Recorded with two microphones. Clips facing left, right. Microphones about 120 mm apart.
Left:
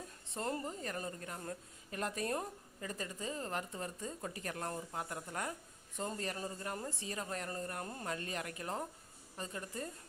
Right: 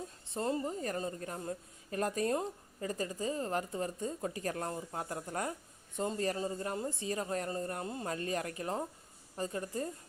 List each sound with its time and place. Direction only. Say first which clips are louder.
0.3 s speech: right 5 dB; 25° right (ahead or behind)
0.7 s a woman's voice: right 5 dB; 35° right (ahead or behind)